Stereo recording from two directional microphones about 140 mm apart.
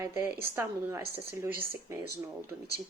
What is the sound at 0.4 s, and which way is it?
A woman's voice, 20° right (ahead or behind).